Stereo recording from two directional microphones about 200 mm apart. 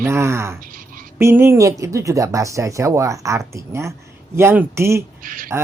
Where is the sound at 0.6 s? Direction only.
45° right (ahead or behind).